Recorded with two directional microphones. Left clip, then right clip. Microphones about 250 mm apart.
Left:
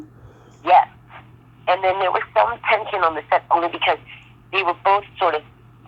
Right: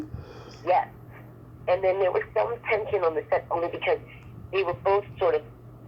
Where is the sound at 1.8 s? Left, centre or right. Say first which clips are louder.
Left 5 dB; left.